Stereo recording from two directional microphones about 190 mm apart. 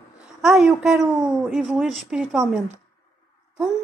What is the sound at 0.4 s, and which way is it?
Speech, centre (ahead or behind).